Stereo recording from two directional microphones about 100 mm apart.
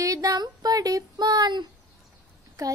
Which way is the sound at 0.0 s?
35° right (ahead or behind).